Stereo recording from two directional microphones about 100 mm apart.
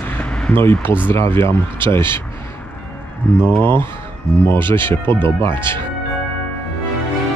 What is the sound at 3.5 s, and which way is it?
Speech, 20° left (ahead or behind).